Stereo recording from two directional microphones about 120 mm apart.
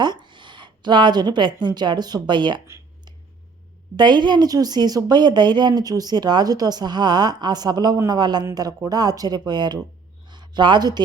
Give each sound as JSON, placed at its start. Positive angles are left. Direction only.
{"t": 0.0, "sound": "a woman's voice", "side_deg": -35}
{"t": 3.9, "sound": "speech", "side_deg": -40}
{"t": 10.2, "sound": "a sound", "side_deg": -35}